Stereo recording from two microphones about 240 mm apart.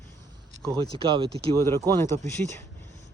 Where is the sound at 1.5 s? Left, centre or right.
Centre.